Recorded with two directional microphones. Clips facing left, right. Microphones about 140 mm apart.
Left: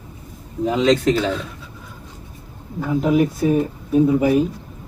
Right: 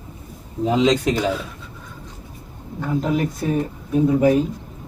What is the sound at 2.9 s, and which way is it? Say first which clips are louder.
Speech: left 4 dB; centre (ahead or behind).